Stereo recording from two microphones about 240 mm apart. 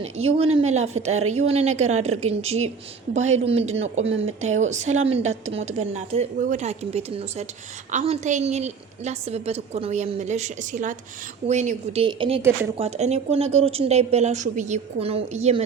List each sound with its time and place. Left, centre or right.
0.0 s a woman's voice: right
4.0 s speech: right
4.4 s a woman's voice: right